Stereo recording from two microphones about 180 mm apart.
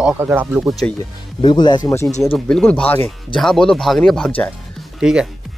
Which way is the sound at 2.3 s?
5° left (ahead or behind).